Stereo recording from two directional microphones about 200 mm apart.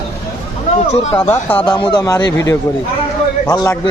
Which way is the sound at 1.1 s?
10° left (ahead or behind).